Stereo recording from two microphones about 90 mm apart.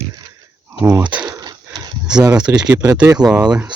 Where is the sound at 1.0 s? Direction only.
60° right (ahead or behind).